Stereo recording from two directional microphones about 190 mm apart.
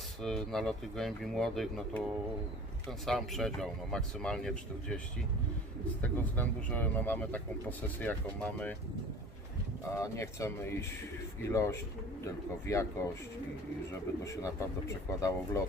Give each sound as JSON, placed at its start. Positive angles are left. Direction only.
{"t": 0.2, "sound": "speech", "side_deg": 0}
{"t": 3.1, "sound": "speech", "side_deg": 0}
{"t": 6.0, "sound": "speech", "side_deg": 10}
{"t": 9.9, "sound": "speech", "side_deg": 15}
{"t": 14.4, "sound": "speech", "side_deg": 15}